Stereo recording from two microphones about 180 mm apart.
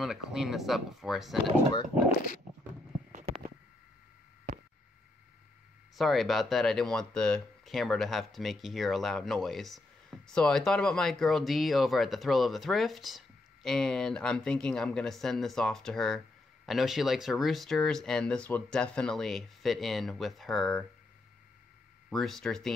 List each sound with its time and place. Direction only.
0.0 s speech: centre (ahead or behind)
3.1 s a sound: 45° right (ahead or behind)
5.9 s speech: centre (ahead or behind)
22.1 s speech: centre (ahead or behind)